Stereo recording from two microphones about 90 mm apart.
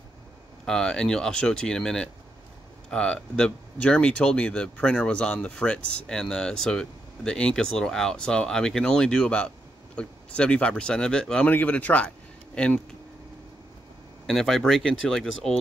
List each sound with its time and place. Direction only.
0.7 s speech: 5° left (ahead or behind)
14.2 s speech: 5° left (ahead or behind)